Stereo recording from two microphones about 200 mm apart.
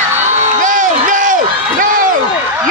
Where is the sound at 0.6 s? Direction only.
40° right (ahead or behind).